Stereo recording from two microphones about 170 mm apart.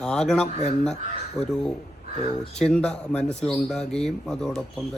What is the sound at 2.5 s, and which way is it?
Speech, 5° left (ahead or behind).